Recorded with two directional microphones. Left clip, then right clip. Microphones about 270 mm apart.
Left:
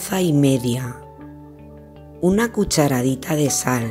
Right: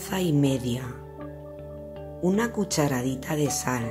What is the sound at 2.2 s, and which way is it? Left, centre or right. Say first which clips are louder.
Speech: left 7 dB; centre.